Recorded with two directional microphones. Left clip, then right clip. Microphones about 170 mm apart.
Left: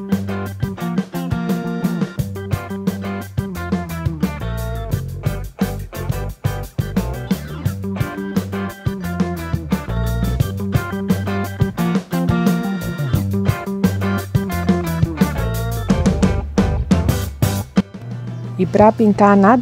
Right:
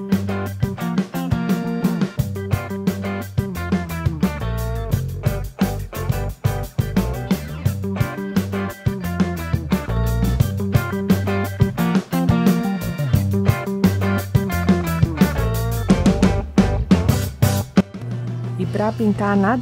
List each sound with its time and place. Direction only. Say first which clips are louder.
0.3 s music: even; centre (ahead or behind)
18.6 s speech: left 10 dB; 30° left (ahead or behind)